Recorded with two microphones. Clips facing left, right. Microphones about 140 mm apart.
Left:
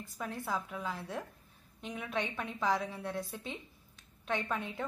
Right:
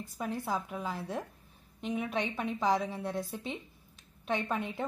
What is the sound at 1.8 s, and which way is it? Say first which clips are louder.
A woman's voice: right 4 dB; 20° right (ahead or behind).